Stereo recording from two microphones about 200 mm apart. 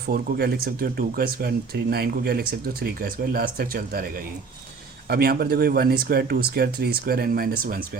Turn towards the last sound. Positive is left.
turn(degrees=-45)  # may be behind; listen again after turning